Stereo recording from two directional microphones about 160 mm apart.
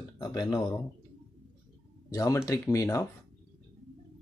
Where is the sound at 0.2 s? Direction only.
25° left (ahead or behind).